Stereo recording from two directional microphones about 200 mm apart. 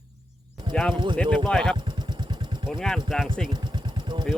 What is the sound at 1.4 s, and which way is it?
Speech, 5° left (ahead or behind).